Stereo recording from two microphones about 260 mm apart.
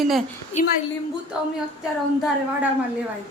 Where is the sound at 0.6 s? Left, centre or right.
Left.